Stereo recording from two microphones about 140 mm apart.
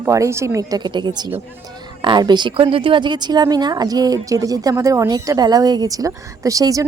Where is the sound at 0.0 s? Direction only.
20° right (ahead or behind).